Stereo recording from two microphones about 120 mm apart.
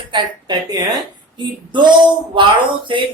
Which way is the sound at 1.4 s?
40° right (ahead or behind).